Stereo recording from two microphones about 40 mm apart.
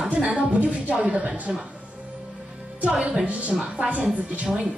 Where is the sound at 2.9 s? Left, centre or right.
Right.